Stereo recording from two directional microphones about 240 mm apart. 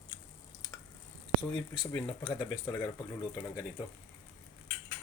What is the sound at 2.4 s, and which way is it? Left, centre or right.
Speech, centre.